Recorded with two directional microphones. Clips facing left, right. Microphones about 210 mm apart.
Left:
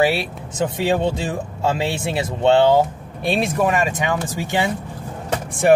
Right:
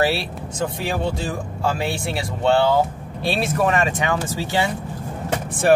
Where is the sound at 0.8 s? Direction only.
20° left (ahead or behind).